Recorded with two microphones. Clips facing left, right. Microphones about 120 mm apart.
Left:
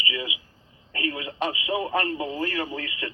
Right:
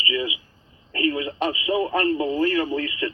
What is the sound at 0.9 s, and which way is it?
Speech, 30° right (ahead or behind).